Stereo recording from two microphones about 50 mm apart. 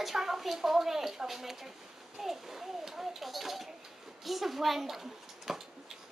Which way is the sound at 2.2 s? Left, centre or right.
Centre.